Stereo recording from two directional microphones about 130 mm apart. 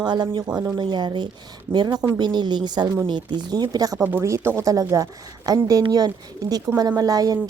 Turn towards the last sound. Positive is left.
turn(degrees=-30)  # may be behind; listen again after turning